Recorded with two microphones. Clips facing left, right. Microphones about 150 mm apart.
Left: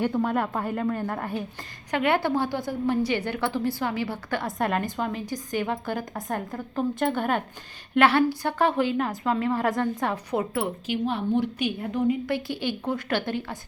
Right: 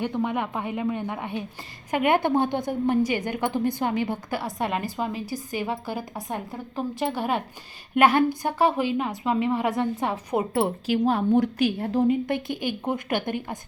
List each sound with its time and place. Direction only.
0.2 s a woman's voice: 5° right (ahead or behind)
4.4 s a woman's voice: centre (ahead or behind)
7.9 s a woman's voice: 15° right (ahead or behind)
9.5 s a woman's voice: centre (ahead or behind)
9.8 s a woman's voice: 20° right (ahead or behind)
11.0 s a woman's voice: 40° right (ahead or behind)
12.3 s a woman's voice: 15° right (ahead or behind)